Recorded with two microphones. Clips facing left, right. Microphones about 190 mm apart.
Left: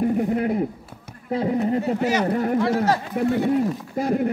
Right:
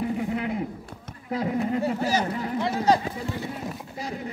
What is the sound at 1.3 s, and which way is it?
Speech, 35° left (ahead or behind).